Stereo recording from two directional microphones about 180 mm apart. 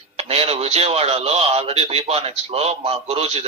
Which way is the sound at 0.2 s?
35° right (ahead or behind).